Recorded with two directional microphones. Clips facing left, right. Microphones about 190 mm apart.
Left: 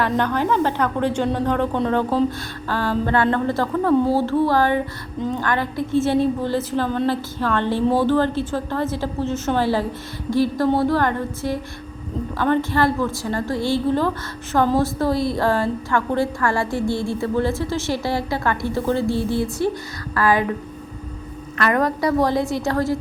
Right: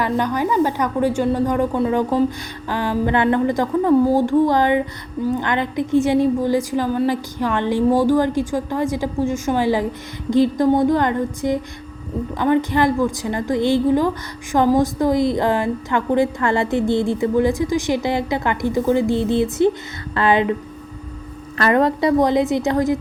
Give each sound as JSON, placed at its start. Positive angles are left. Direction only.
{"t": 0.0, "sound": "a woman's voice", "side_deg": -10}
{"t": 21.6, "sound": "a woman's voice", "side_deg": -25}